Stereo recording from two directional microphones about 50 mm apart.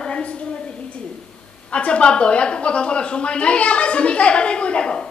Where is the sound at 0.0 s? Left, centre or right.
Centre.